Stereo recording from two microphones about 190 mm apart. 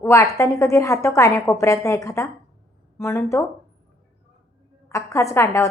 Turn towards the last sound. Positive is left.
turn(degrees=15)  # may be behind; listen again after turning